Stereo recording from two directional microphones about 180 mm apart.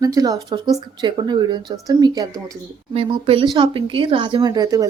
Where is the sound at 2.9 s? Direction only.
30° right (ahead or behind).